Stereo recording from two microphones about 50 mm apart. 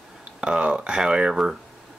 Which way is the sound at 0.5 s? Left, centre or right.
Centre.